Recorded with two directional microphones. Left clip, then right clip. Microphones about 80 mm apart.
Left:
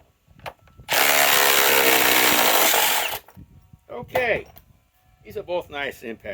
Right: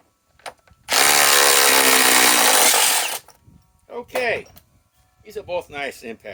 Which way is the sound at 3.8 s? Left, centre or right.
Left.